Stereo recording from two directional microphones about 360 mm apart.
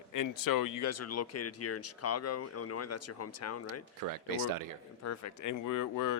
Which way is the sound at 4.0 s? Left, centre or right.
Right.